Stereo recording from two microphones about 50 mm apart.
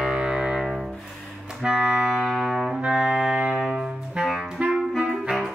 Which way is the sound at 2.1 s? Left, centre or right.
Centre.